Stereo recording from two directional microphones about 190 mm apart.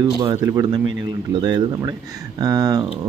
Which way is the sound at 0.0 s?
20° right (ahead or behind).